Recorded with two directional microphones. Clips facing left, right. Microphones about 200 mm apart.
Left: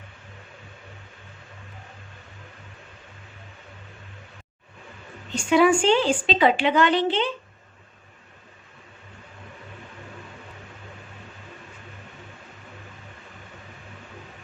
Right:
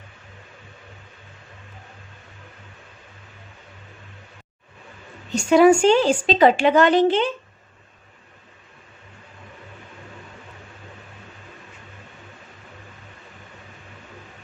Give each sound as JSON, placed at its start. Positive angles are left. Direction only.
{"t": 5.3, "sound": "a woman's voice", "side_deg": -40}